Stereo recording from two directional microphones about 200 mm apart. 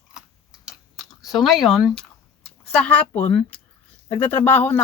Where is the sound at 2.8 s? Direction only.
5° left (ahead or behind).